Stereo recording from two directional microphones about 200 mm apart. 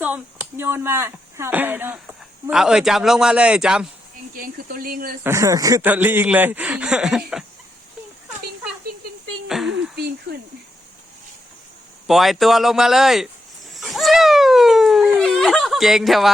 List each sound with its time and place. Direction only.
0.0 s speech: 5° right (ahead or behind)
4.4 s speech: 45° right (ahead or behind)
5.2 s speech: 15° right (ahead or behind)
9.5 s a sound: centre (ahead or behind)
12.0 s speech: centre (ahead or behind)
13.7 s a sound: centre (ahead or behind)